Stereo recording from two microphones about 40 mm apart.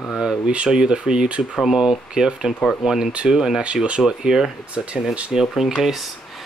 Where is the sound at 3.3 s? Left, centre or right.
Centre.